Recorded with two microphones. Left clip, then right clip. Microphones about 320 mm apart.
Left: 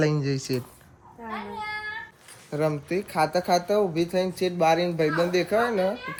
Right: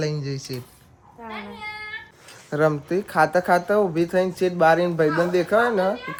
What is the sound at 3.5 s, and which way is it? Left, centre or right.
Speech, right.